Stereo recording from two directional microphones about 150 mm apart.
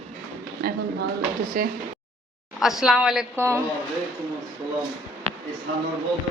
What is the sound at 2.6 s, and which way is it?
Speech, 5° right (ahead or behind).